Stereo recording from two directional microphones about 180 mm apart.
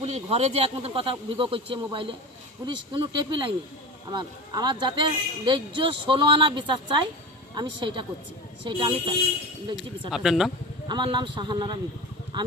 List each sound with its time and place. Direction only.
0.0 s a man's voice: 35° right (ahead or behind)
9.7 s speech: centre (ahead or behind)
10.8 s a man's voice: 25° right (ahead or behind)